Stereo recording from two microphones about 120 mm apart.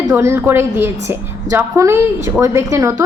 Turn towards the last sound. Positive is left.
turn(degrees=-25)  # may be behind; listen again after turning